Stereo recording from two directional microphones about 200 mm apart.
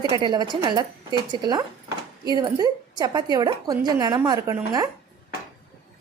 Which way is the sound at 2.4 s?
20° right (ahead or behind).